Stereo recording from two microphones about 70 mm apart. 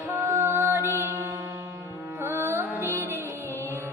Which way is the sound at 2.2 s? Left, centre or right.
Right.